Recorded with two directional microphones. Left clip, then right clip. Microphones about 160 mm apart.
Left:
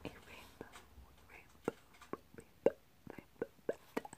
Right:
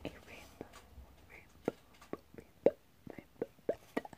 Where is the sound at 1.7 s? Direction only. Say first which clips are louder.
Right 2 dB; 10° left (ahead or behind).